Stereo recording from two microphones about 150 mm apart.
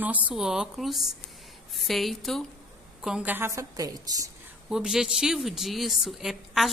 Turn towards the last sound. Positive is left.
turn(degrees=0)  # may be behind; listen again after turning